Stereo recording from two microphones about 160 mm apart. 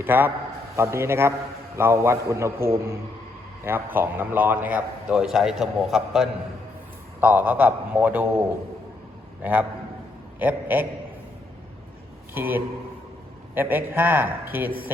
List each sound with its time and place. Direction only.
0.0 s a man's voice: 15° right (ahead or behind)
9.4 s a man's voice: 10° right (ahead or behind)
12.3 s a man's voice: 10° right (ahead or behind)